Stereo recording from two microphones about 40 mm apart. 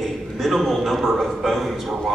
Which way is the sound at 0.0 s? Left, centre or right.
Centre.